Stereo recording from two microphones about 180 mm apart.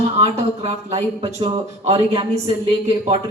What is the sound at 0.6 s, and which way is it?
A woman's voice, 35° right (ahead or behind).